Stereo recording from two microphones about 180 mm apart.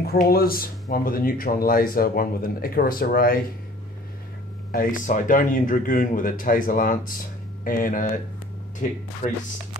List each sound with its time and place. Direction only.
0.0 s speech: 60° left (ahead or behind)
4.7 s speech: 45° left (ahead or behind)
9.2 s speech: 35° left (ahead or behind)